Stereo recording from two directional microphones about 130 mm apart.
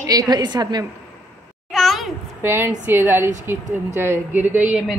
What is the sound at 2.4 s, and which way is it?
Speech, 15° right (ahead or behind).